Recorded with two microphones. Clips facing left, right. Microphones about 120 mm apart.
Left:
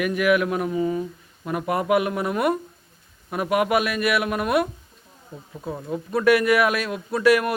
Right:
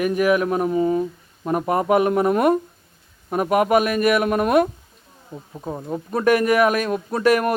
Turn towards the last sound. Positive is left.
turn(degrees=-45)  # may be behind; listen again after turning